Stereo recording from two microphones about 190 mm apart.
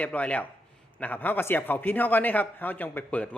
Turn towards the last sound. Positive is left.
turn(degrees=5)  # may be behind; listen again after turning